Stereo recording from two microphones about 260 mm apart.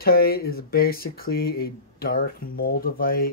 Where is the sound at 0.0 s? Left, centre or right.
Left.